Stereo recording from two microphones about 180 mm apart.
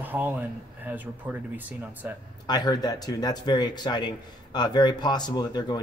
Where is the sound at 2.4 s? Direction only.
25° left (ahead or behind).